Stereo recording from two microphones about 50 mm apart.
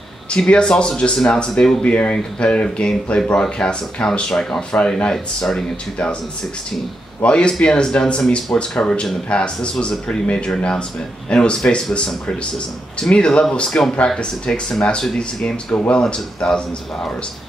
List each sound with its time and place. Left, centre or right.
0.3 s speech: left
1.9 s speech: left; by 5.7 s centre
7.2 s speech: left
13.1 s speech: centre
13.7 s speech: centre